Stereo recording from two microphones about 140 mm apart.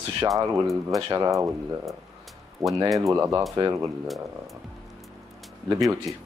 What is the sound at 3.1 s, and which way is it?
Speech, 25° right (ahead or behind).